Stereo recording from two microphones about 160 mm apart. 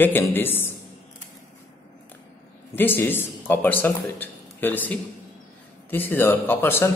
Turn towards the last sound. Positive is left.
turn(degrees=15)  # may be behind; listen again after turning